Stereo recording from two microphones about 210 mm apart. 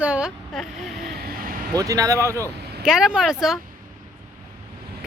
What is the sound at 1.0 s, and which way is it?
Vehicle, 50° right (ahead or behind).